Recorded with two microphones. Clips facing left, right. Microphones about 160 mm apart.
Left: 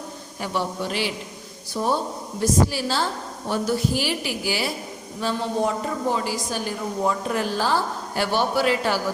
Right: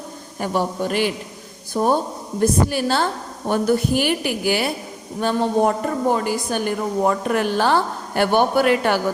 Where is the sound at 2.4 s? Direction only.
55° right (ahead or behind).